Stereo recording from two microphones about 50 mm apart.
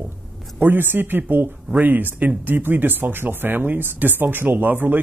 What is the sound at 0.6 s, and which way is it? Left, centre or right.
Speech, right.